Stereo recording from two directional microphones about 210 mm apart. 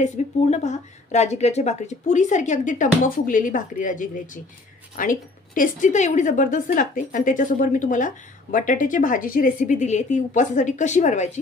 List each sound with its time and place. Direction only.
0.0 s a woman's voice: 35° left (ahead or behind)